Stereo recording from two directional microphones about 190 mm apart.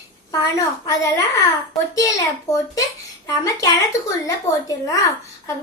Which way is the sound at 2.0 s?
15° left (ahead or behind).